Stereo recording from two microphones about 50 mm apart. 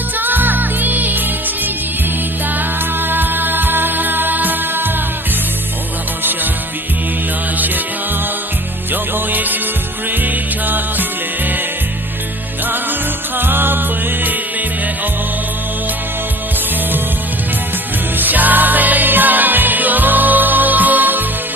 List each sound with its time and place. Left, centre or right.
0.2 s music: right
8.9 s music: right
12.6 s music: right
18.2 s music: right